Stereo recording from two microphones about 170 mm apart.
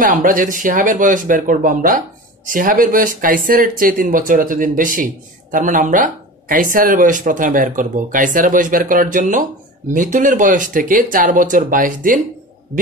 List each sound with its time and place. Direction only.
0.0 s speech: 50° right (ahead or behind)